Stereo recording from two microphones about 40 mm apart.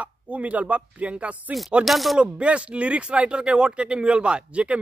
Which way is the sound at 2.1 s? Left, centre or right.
Right.